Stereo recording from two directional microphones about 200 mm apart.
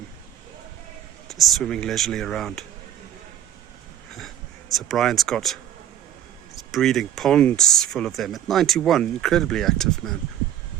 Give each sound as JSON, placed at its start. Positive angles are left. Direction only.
{"t": 1.3, "sound": "speech", "side_deg": 0}
{"t": 4.7, "sound": "speech", "side_deg": 0}
{"t": 6.7, "sound": "speech", "side_deg": 0}